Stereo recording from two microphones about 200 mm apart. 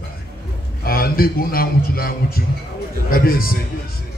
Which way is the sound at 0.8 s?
50° left (ahead or behind).